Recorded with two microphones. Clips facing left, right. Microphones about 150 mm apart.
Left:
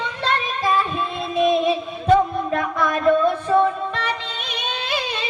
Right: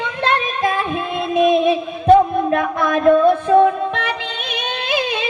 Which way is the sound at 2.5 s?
55° right (ahead or behind).